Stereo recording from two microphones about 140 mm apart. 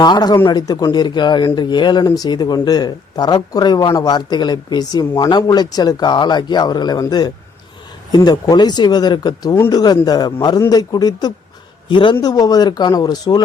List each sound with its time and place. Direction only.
0.0 s a man's voice: 30° left (ahead or behind)